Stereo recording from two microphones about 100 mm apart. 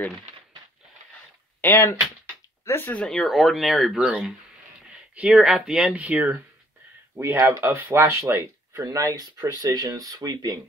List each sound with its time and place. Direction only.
1.6 s speech: 20° left (ahead or behind)
3.0 s speech: 5° left (ahead or behind)
5.1 s speech: 10° right (ahead or behind)
7.2 s speech: 30° right (ahead or behind)